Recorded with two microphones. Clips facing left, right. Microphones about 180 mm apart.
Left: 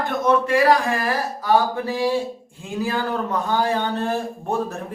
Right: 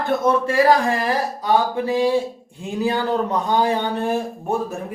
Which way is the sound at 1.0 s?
15° right (ahead or behind).